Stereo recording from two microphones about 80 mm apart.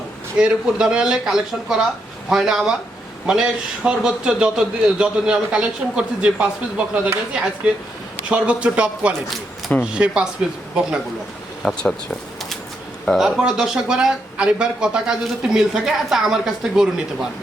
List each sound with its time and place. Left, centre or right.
0.3 s speech: centre
11.6 s speech: centre
13.1 s speech: centre